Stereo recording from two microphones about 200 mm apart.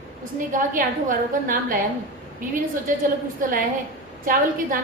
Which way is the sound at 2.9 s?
40° right (ahead or behind).